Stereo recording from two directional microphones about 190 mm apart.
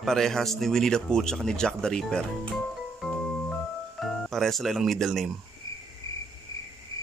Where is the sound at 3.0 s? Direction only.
5° left (ahead or behind).